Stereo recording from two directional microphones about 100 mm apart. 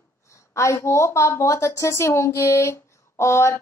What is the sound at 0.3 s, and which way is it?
A woman's voice, 30° left (ahead or behind).